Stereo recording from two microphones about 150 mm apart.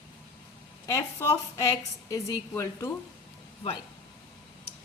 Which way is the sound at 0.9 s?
20° left (ahead or behind).